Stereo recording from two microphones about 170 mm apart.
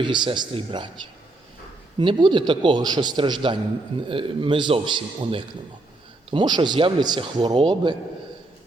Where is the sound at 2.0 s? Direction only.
25° right (ahead or behind).